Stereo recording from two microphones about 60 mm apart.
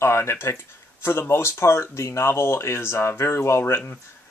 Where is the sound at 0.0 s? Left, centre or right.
Left.